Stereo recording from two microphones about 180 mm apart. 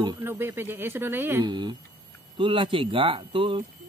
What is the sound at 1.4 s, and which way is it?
Speech, 25° right (ahead or behind).